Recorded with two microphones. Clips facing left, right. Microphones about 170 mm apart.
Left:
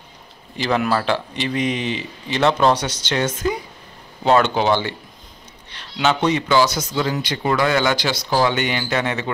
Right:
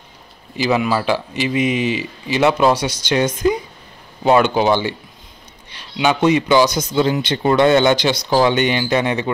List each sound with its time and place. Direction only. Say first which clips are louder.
0.6 s speech: right 2 dB; 5° right (ahead or behind)